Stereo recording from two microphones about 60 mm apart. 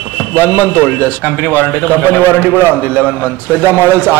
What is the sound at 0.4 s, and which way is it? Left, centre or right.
A man's voice, left.